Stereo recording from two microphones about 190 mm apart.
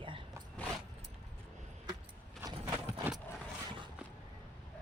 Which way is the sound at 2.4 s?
15° right (ahead or behind).